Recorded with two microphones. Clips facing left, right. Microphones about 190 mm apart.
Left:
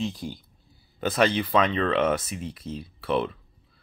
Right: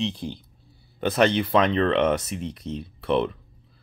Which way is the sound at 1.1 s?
Centre (ahead or behind).